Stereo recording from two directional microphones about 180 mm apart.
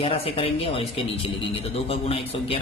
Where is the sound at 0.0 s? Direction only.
35° left (ahead or behind).